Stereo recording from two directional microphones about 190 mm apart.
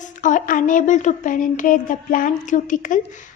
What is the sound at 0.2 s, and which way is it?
Speech, 40° left (ahead or behind).